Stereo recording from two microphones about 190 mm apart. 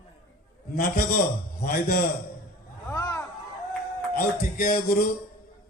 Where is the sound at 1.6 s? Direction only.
55° left (ahead or behind).